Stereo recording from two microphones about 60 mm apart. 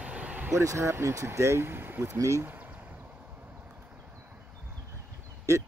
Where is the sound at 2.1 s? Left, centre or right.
Right.